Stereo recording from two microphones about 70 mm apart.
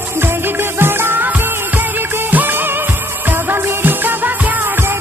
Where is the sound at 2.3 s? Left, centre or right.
Right.